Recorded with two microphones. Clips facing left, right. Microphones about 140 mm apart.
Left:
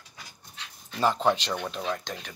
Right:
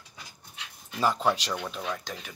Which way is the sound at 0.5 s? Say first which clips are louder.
Left 1 dB; 10° right (ahead or behind).